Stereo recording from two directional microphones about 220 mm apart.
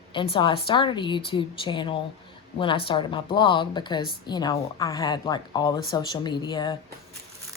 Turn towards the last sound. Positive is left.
turn(degrees=20)  # may be behind; listen again after turning